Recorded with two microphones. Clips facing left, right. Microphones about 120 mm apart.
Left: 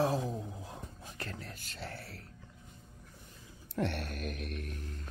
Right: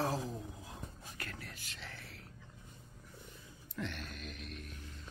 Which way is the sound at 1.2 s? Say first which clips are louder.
Left 4 dB; 30° left (ahead or behind).